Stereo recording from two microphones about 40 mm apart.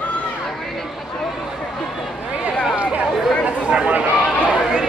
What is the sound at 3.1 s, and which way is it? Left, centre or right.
Chatter, centre.